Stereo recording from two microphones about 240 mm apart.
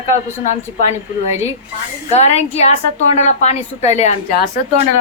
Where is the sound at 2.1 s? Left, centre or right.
Left.